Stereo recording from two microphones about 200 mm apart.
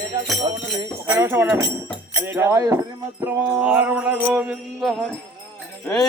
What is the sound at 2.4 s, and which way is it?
Music, 15° right (ahead or behind).